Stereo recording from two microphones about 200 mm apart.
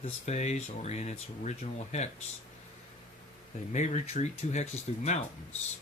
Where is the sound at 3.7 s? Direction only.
35° left (ahead or behind).